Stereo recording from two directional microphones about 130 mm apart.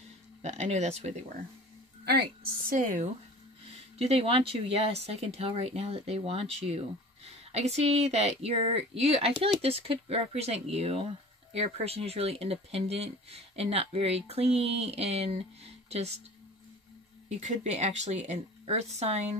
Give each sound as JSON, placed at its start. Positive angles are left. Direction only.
{"t": 0.4, "sound": "speech", "side_deg": -60}
{"t": 2.7, "sound": "speech", "side_deg": -80}
{"t": 4.0, "sound": "speech", "side_deg": -45}
{"t": 17.3, "sound": "speech", "side_deg": -60}